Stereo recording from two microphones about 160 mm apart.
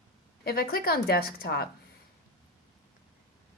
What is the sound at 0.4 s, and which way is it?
A woman's voice, 70° left (ahead or behind).